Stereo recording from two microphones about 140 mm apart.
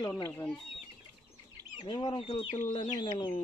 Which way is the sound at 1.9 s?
35° left (ahead or behind).